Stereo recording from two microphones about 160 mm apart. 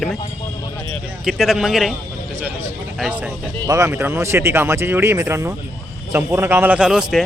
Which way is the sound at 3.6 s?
20° right (ahead or behind).